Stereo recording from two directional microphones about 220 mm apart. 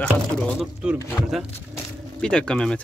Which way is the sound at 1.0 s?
15° left (ahead or behind).